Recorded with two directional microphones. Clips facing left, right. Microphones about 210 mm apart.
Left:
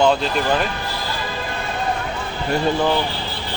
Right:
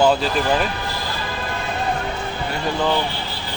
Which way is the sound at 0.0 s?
5° right (ahead or behind).